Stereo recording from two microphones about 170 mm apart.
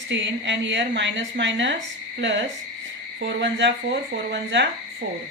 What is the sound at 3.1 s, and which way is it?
A woman's voice, 90° right.